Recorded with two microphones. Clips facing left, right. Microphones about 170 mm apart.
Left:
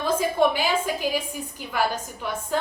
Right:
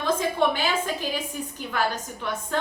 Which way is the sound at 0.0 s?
10° left (ahead or behind).